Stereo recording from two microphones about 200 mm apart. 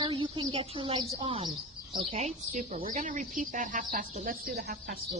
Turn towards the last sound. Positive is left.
turn(degrees=-45)  # may be behind; listen again after turning